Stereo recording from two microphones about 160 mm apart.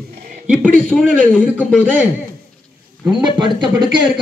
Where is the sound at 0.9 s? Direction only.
5° left (ahead or behind).